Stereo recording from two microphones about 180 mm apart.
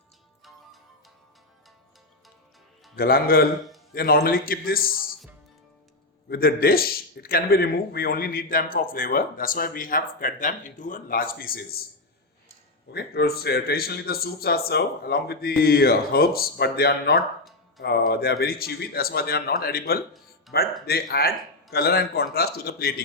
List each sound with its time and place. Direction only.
2.9 s a man's voice: 55° left (ahead or behind)
6.2 s a man's voice: 55° left (ahead or behind)
12.9 s speech: 65° left (ahead or behind)